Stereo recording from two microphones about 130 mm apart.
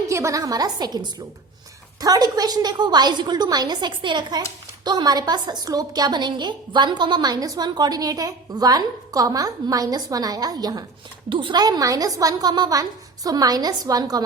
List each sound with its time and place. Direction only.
0.1 s a woman's voice: 25° right (ahead or behind)